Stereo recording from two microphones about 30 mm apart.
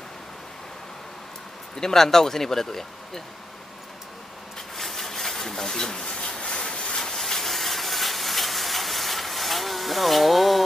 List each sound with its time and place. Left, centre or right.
1.8 s speech: centre
4.7 s rub: centre
6.0 s a sound: left; by 10.6 s centre